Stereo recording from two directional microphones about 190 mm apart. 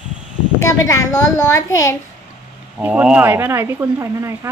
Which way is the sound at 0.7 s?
15° left (ahead or behind).